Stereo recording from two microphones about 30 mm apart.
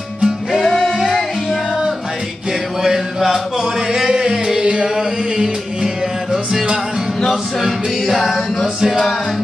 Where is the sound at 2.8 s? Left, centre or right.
Centre.